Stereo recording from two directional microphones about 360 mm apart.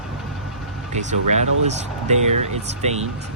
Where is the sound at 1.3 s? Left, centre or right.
Centre.